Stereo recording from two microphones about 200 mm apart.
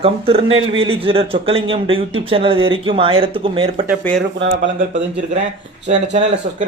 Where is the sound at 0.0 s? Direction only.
30° right (ahead or behind).